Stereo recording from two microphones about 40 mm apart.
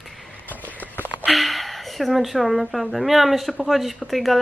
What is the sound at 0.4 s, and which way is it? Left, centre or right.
Walk, left.